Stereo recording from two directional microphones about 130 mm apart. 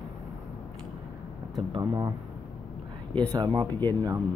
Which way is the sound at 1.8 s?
25° right (ahead or behind).